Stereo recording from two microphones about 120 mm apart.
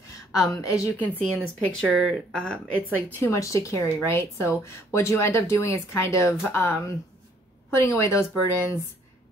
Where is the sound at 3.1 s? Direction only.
25° left (ahead or behind).